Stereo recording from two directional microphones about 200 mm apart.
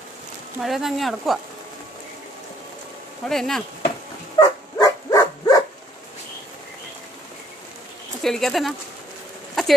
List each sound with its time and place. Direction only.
0.6 s speech: centre (ahead or behind)
3.3 s speech: centre (ahead or behind)
4.4 s dog: 20° left (ahead or behind)
8.2 s speech: centre (ahead or behind)